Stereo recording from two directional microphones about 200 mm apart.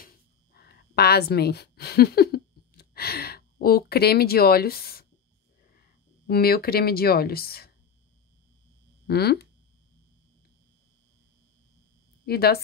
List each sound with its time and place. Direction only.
0.6 s speech: 55° left (ahead or behind)
9.0 s speech: 55° left (ahead or behind)
12.3 s speech: 50° left (ahead or behind)